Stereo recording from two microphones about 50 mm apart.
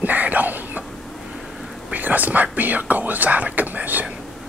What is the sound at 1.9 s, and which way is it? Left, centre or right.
Speech, right.